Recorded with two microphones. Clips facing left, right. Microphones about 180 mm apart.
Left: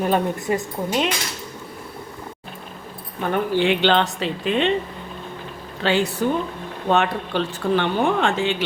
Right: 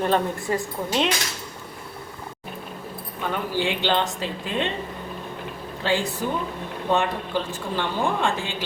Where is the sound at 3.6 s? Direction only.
65° left (ahead or behind).